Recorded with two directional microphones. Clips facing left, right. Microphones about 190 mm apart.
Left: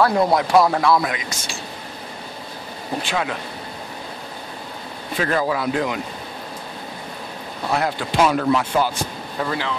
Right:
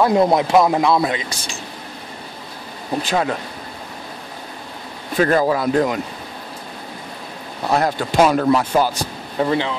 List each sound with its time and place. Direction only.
0.0 s speech: 20° right (ahead or behind)
3.0 s speech: 40° right (ahead or behind)
5.1 s speech: 40° right (ahead or behind)
7.7 s speech: 40° right (ahead or behind)
9.4 s speech: 25° right (ahead or behind)